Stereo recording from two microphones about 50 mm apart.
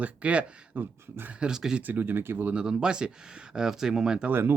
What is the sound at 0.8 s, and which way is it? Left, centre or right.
Speech, right.